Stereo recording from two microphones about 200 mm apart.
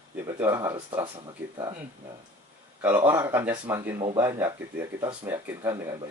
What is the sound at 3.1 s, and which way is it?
Speech, 10° right (ahead or behind).